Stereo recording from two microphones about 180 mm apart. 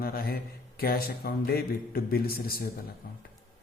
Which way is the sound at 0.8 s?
55° left (ahead or behind).